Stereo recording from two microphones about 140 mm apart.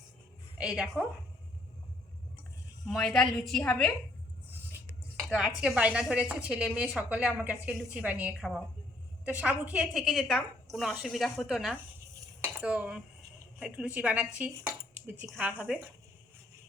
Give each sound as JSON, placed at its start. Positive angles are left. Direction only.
{"t": 0.6, "sound": "a woman's voice", "side_deg": -5}
{"t": 2.8, "sound": "a woman's voice", "side_deg": 0}
{"t": 5.3, "sound": "a woman's voice", "side_deg": -5}
{"t": 12.4, "sound": "dishes", "side_deg": -10}
{"t": 13.6, "sound": "speech", "side_deg": -10}